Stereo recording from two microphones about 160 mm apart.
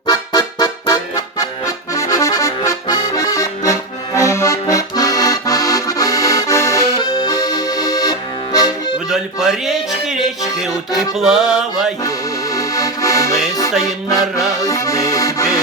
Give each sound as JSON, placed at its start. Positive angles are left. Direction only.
{"t": 0.1, "sound": "music", "side_deg": 20}
{"t": 1.4, "sound": "accordion", "side_deg": 20}
{"t": 9.0, "sound": "music", "side_deg": 0}
{"t": 12.0, "sound": "accordion", "side_deg": 20}